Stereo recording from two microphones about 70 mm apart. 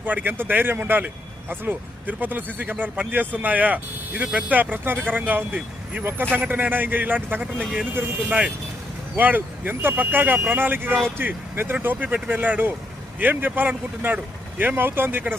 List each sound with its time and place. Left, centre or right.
0.0 s speech: right
9.1 s speech: right